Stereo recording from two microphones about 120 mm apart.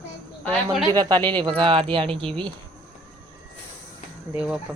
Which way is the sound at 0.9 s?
35° right (ahead or behind).